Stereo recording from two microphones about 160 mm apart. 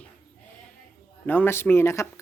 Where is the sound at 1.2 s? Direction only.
10° left (ahead or behind).